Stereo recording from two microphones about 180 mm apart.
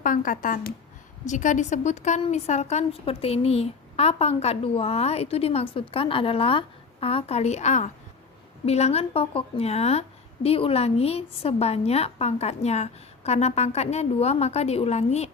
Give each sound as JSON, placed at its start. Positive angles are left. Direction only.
{"t": 0.0, "sound": "a woman's voice", "side_deg": 50}